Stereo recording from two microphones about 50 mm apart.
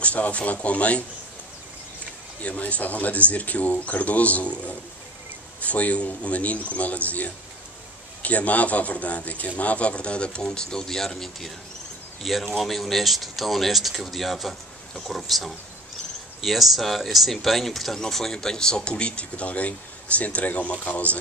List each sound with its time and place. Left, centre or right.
0.0 s speech: left
2.4 s speech: left